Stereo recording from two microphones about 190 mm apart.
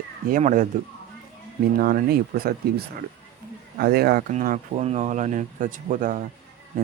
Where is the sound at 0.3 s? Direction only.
45° right (ahead or behind).